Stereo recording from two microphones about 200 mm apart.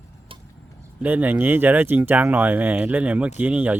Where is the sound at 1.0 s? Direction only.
10° right (ahead or behind).